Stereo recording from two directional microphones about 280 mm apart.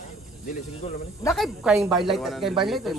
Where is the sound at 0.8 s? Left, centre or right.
Left.